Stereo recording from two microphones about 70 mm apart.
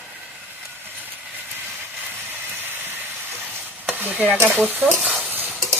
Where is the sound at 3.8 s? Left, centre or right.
Right.